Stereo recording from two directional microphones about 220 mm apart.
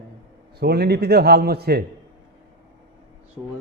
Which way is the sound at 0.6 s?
45° right (ahead or behind).